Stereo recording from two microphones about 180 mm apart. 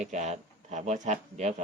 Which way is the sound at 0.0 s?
40° right (ahead or behind).